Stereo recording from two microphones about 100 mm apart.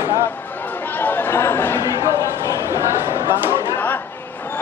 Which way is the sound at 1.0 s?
20° left (ahead or behind).